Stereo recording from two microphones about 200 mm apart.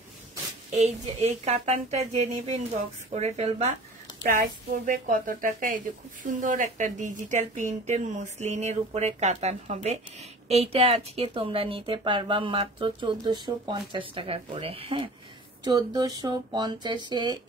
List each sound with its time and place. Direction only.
0.7 s a woman's voice: 35° right (ahead or behind)